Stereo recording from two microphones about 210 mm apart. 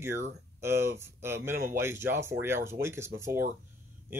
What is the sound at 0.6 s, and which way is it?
Speech, 10° right (ahead or behind).